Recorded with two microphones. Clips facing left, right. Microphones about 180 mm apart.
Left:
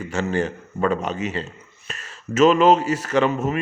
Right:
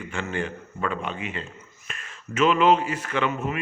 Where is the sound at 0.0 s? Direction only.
40° left (ahead or behind).